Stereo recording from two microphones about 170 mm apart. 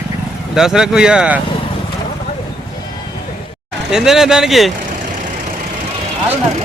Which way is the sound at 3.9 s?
5° right (ahead or behind).